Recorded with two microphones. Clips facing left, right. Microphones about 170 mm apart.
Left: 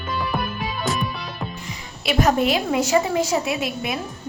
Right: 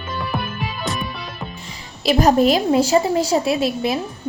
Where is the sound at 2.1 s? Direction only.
35° right (ahead or behind).